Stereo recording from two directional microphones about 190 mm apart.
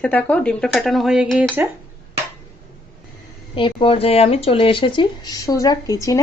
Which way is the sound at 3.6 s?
30° left (ahead or behind).